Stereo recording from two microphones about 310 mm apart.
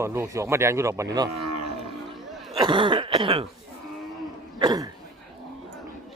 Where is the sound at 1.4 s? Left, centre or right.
Right.